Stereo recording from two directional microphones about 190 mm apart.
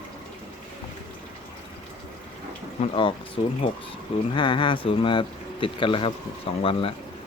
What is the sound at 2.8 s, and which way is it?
Speech, 25° left (ahead or behind).